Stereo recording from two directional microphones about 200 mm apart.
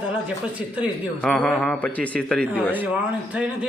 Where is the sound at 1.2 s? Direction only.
5° left (ahead or behind).